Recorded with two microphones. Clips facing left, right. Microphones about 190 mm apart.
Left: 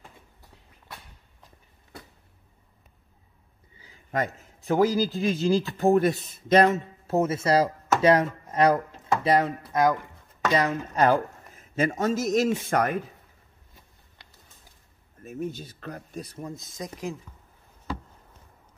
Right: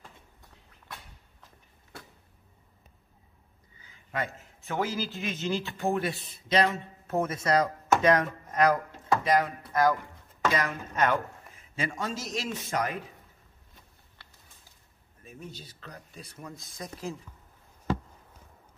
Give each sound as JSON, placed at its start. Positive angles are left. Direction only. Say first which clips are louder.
{"t": 3.8, "sound": "a man's voice", "louder": "left 6 dB", "side_deg": 40}
{"t": 7.1, "sound": "speech", "louder": "left 4 dB", "side_deg": 25}
{"t": 15.2, "sound": "speech", "louder": "left 11 dB", "side_deg": 50}